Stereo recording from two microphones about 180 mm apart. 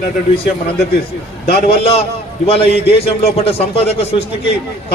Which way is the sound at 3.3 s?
35° left (ahead or behind).